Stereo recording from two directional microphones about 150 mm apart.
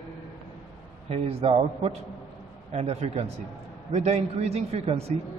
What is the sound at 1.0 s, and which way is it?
A man's voice, 40° right (ahead or behind).